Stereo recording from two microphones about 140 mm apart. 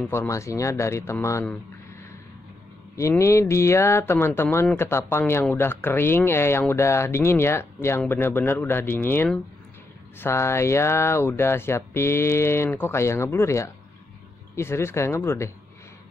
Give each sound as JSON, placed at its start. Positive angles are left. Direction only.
{"t": 0.0, "sound": "speech", "side_deg": 10}
{"t": 0.3, "sound": "speech", "side_deg": 20}
{"t": 3.0, "sound": "speech", "side_deg": 20}